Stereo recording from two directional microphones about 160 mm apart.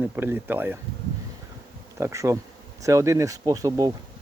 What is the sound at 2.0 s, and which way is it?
Speech, 15° right (ahead or behind).